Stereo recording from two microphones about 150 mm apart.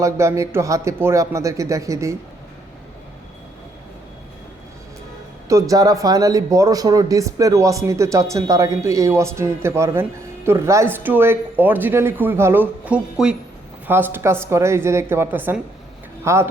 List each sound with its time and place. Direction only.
0.0 s speech: 20° right (ahead or behind)
5.5 s speech: 25° right (ahead or behind)